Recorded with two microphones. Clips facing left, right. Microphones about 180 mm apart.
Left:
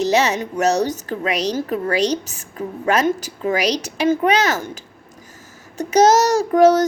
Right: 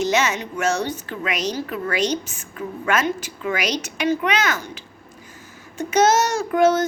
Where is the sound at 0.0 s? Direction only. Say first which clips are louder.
Left 3 dB; 35° left (ahead or behind).